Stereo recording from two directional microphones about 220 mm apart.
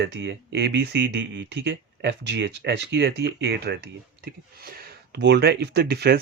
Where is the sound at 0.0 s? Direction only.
50° right (ahead or behind).